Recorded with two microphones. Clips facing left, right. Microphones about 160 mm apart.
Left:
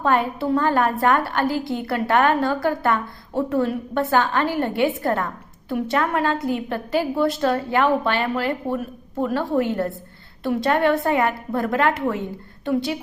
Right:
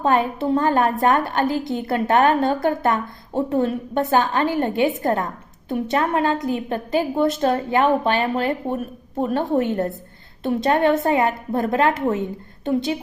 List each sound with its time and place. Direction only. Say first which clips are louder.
0.0 s a woman's voice: right 1 dB; 20° right (ahead or behind)